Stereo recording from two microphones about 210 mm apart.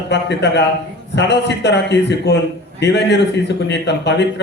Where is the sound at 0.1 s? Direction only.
55° left (ahead or behind).